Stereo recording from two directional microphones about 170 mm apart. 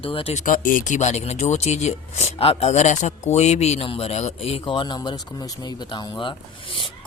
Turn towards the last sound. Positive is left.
turn(degrees=30)  # may be behind; listen again after turning